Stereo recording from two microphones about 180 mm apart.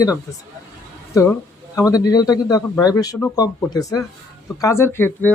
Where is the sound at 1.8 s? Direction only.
20° left (ahead or behind).